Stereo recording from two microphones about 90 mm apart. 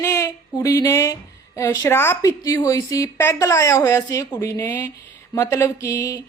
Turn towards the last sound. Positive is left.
turn(degrees=35)  # may be behind; listen again after turning